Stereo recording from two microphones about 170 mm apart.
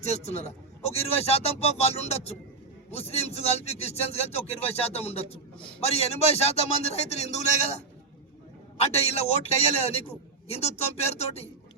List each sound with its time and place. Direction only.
0.0 s speech: 40° left (ahead or behind)
8.8 s speech: 35° left (ahead or behind)